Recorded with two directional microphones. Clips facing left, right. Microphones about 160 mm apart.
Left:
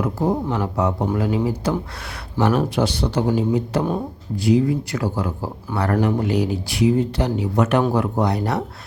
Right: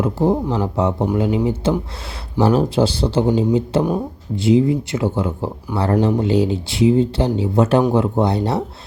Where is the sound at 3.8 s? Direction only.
5° right (ahead or behind).